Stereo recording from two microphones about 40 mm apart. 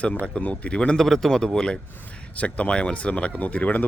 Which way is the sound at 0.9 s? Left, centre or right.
Centre.